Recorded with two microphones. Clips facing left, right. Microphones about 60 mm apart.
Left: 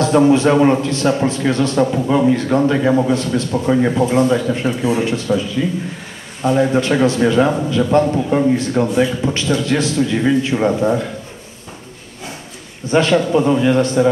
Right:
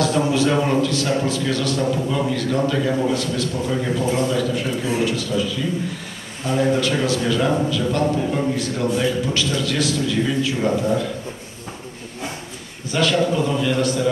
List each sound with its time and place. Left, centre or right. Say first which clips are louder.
0.0 s a man's voice: left 7 dB; left
12.9 s a man's voice: left 5 dB; left